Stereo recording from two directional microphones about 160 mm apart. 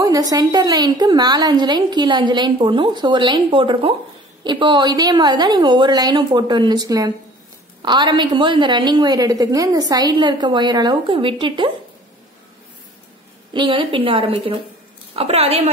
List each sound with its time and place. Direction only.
0.0 s a woman's voice: 25° right (ahead or behind)
13.5 s a woman's voice: 30° right (ahead or behind)